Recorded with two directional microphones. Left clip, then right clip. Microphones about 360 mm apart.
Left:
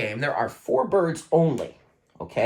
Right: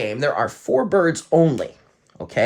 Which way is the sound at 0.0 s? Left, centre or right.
Centre.